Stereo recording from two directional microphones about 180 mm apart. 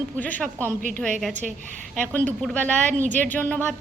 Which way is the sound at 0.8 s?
45° right (ahead or behind).